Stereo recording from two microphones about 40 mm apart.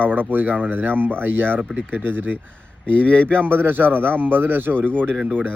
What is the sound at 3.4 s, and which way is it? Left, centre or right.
A man's voice, right.